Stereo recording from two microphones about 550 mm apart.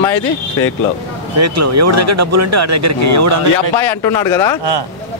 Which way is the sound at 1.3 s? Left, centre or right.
Right.